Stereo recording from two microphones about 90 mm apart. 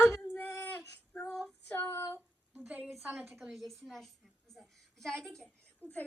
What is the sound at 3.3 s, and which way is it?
A woman's voice, 5° right (ahead or behind).